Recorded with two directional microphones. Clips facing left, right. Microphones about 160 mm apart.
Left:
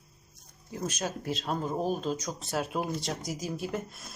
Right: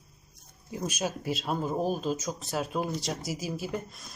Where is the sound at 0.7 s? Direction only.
10° right (ahead or behind).